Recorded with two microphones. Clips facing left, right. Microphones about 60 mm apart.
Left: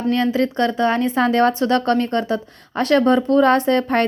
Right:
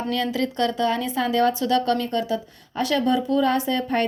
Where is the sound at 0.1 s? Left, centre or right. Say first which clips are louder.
Left 8 dB; left.